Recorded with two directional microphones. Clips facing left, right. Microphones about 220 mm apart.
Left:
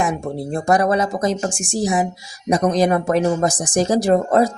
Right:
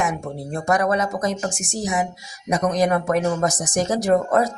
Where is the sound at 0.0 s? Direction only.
35° left (ahead or behind).